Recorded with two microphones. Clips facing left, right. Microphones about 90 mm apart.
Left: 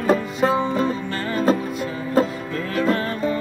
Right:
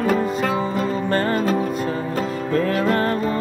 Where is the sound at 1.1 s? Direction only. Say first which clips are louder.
Right 3 dB; 45° right (ahead or behind).